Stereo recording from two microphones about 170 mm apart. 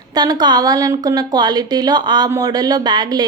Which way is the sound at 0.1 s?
25° right (ahead or behind).